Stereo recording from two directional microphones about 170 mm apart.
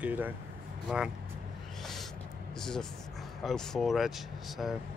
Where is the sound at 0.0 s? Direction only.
10° right (ahead or behind).